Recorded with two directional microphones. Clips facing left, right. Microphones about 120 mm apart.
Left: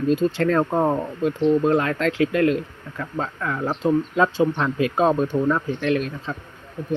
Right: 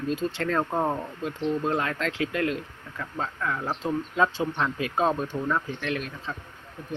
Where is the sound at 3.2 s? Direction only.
5° left (ahead or behind).